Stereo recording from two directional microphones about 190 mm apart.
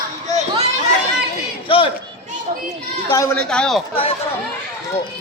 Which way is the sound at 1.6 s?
30° left (ahead or behind).